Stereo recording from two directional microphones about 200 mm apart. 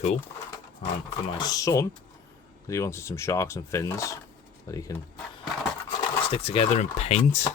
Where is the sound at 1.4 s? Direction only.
20° left (ahead or behind).